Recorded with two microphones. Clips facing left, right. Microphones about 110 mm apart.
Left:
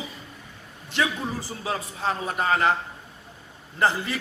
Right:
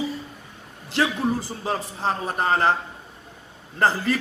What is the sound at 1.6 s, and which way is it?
A man's voice, 35° right (ahead or behind).